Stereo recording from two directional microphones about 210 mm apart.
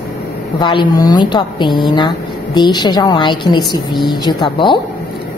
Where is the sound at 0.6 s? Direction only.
20° left (ahead or behind).